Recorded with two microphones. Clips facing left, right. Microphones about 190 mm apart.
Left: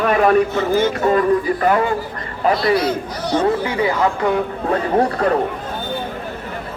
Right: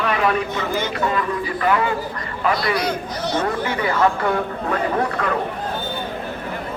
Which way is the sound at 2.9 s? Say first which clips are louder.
Left 3 dB; 10° left (ahead or behind).